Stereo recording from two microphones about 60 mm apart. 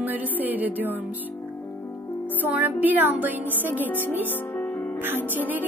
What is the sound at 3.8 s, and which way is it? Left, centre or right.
Music, left.